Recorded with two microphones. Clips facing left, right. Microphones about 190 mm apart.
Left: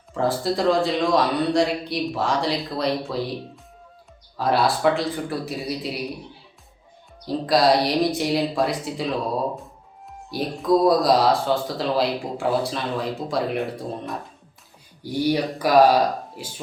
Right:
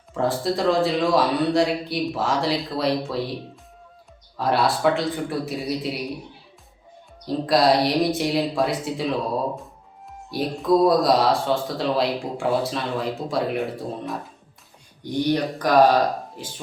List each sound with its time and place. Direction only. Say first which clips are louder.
0.1 s speech: even; centre (ahead or behind)
7.3 s speech: even; centre (ahead or behind)
10.3 s speech: right 1 dB; centre (ahead or behind)